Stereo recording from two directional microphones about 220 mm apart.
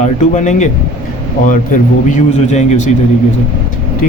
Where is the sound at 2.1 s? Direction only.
30° left (ahead or behind).